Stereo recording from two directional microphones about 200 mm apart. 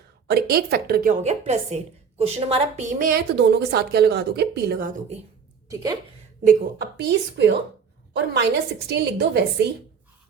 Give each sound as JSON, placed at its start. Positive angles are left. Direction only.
{"t": 0.3, "sound": "a woman's voice", "side_deg": -50}
{"t": 1.2, "sound": "a woman's voice", "side_deg": -35}
{"t": 5.6, "sound": "a woman's voice", "side_deg": -20}
{"t": 6.4, "sound": "speech", "side_deg": -50}
{"t": 8.9, "sound": "speech", "side_deg": -55}